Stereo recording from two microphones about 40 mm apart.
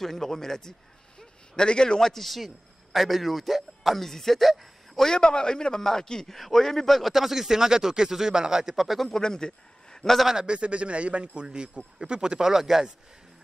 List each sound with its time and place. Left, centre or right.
0.0 s a man's voice: centre
1.6 s a man's voice: left; by 5.0 s centre
5.0 s a man's voice: left; by 8.7 s centre
8.7 s a man's voice: centre
9.1 s a man's voice: centre
10.4 s a man's voice: right; by 12.9 s centre